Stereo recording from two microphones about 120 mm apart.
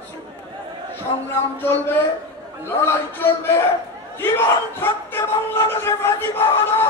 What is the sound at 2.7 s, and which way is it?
Speech, 20° left (ahead or behind).